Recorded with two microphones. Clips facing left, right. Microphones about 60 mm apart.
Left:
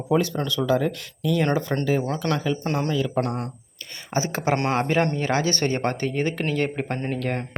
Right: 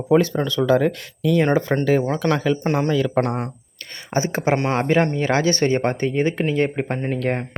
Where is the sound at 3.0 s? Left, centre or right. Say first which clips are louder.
Right 4 dB; right.